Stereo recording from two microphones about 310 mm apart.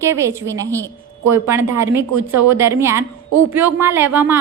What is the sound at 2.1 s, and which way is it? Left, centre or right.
Speech, right.